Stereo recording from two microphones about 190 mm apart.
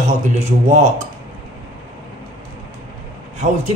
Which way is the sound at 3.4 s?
40° right (ahead or behind).